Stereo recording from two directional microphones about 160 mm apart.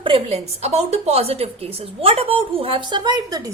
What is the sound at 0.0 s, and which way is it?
A woman's voice, 35° right (ahead or behind).